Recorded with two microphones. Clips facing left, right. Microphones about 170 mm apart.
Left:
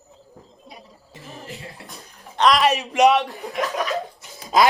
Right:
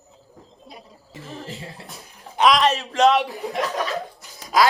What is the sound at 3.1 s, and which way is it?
Speech, centre (ahead or behind).